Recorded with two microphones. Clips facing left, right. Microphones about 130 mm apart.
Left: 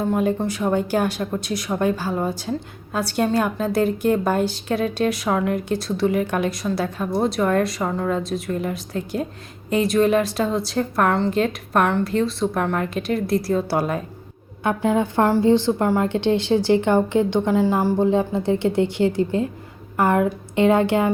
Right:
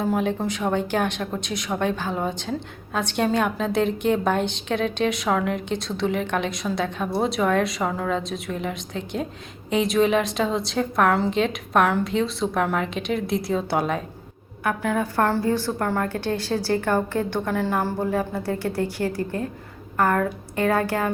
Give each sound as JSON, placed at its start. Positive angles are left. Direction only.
{"t": 0.0, "sound": "a woman's voice", "side_deg": 5}
{"t": 14.6, "sound": "a woman's voice", "side_deg": 25}